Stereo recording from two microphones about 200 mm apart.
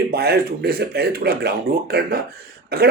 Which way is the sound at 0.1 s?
55° right (ahead or behind).